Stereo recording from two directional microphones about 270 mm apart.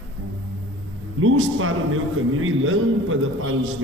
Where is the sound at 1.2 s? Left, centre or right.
Right.